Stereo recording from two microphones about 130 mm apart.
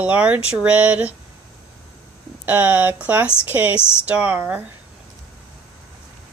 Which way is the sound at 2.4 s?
10° right (ahead or behind).